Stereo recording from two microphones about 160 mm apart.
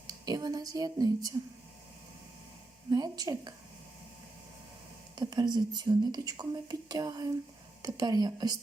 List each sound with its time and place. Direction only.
0.1 s speech: 25° right (ahead or behind)
2.9 s speech: 25° right (ahead or behind)
5.1 s speech: 25° right (ahead or behind)